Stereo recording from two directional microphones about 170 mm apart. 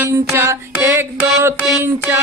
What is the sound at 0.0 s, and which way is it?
Music, 15° right (ahead or behind).